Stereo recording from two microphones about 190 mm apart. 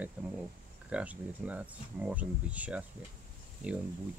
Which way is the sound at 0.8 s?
5° right (ahead or behind).